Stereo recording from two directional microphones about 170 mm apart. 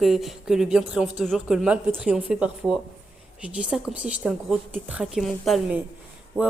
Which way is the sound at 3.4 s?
5° right (ahead or behind).